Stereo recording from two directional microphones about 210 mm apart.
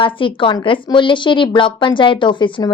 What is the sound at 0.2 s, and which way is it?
Speech, 25° left (ahead or behind).